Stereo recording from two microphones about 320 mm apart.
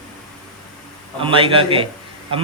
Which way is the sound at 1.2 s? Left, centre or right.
Centre.